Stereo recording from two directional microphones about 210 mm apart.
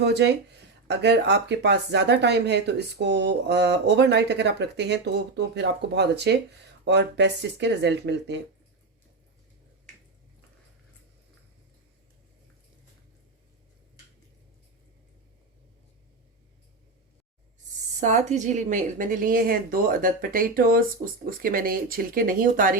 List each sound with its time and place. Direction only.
0.0 s speech: 55° right (ahead or behind)
18.0 s speech: 35° right (ahead or behind)